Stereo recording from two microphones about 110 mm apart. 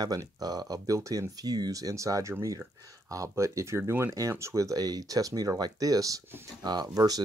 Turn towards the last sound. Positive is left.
turn(degrees=-35)  # may be behind; listen again after turning